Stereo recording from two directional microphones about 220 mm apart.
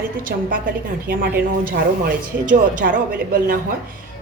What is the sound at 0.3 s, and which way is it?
Speech, 45° right (ahead or behind).